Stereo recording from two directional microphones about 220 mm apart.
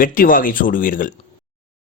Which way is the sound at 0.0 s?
40° left (ahead or behind).